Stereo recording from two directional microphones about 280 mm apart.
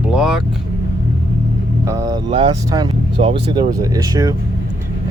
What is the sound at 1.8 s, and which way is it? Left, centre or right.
Vehicle, centre.